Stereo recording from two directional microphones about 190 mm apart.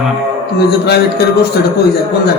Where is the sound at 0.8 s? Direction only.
60° left (ahead or behind).